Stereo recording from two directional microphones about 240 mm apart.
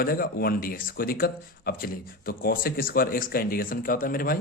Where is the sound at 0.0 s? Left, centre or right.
Left.